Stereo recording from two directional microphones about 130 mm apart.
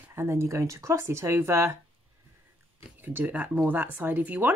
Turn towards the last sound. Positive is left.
turn(degrees=-10)  # may be behind; listen again after turning